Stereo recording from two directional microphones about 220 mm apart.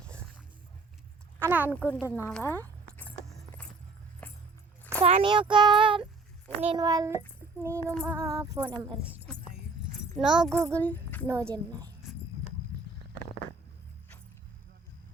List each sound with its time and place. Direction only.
1.4 s speech: 10° right (ahead or behind)
1.7 s speech: 10° left (ahead or behind)
2.3 s a sound: 10° left (ahead or behind)
4.2 s music: 5° left (ahead or behind)
5.0 s a child's voice: 25° right (ahead or behind)
9.0 s a child's voice: 5° left (ahead or behind)
11.5 s a woman's voice: 20° right (ahead or behind)